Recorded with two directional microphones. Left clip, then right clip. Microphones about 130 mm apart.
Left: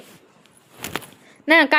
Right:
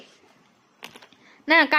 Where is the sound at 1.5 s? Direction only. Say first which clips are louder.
Left 3 dB; 35° left (ahead or behind).